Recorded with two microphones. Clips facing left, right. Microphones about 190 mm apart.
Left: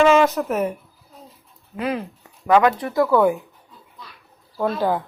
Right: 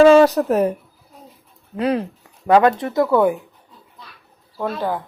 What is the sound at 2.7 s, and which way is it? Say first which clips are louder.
Speech: right 1 dB; 25° right (ahead or behind).